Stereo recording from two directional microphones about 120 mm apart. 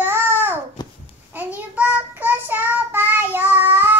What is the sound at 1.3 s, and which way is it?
Child singing, 15° right (ahead or behind).